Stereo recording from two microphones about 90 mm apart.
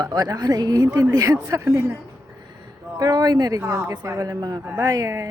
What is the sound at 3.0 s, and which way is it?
Speech, 40° right (ahead or behind).